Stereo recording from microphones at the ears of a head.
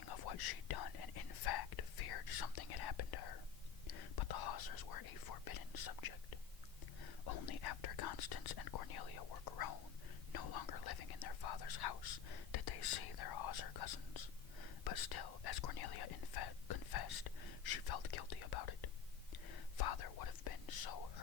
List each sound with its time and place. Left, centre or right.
0.0 s whispering: left
7.0 s speech: left
10.3 s whispering: left